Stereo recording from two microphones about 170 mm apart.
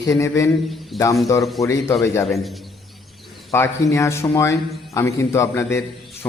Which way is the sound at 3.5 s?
15° left (ahead or behind).